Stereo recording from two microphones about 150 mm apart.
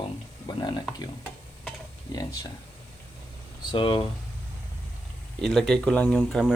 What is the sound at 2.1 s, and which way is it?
Speech, 25° left (ahead or behind).